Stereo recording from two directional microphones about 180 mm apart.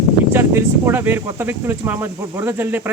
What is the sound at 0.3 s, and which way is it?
Speech, 10° right (ahead or behind).